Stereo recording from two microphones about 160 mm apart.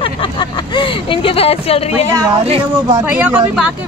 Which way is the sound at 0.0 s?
30° left (ahead or behind).